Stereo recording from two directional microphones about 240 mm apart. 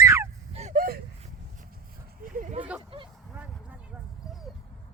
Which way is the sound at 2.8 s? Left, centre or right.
Right.